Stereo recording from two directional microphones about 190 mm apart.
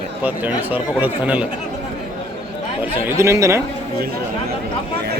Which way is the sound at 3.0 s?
15° right (ahead or behind).